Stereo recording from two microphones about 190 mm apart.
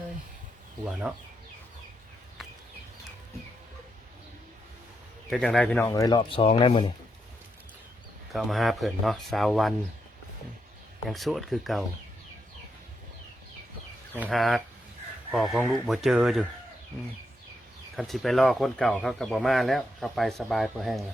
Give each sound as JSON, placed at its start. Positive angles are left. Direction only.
{"t": 0.9, "sound": "speech", "side_deg": -5}
{"t": 5.3, "sound": "speech", "side_deg": 5}
{"t": 8.3, "sound": "speech", "side_deg": 0}
{"t": 11.1, "sound": "speech", "side_deg": 0}
{"t": 14.3, "sound": "speech", "side_deg": 0}
{"t": 17.9, "sound": "speech", "side_deg": 0}